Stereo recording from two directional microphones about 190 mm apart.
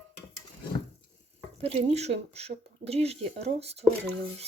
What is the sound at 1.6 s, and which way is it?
Speech, 35° right (ahead or behind).